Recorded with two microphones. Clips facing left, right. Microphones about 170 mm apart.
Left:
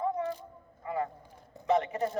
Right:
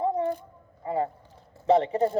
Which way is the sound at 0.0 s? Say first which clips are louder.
Right 6 dB; 30° right (ahead or behind).